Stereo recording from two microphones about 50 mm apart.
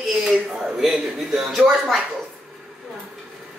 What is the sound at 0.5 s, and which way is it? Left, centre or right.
A man's voice, centre.